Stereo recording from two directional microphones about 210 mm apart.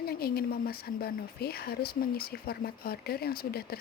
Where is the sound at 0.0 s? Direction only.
45° left (ahead or behind).